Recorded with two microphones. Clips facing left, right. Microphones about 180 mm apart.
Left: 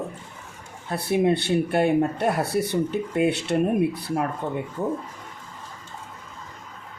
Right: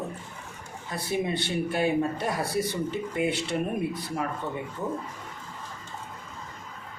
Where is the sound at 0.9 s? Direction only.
65° left (ahead or behind).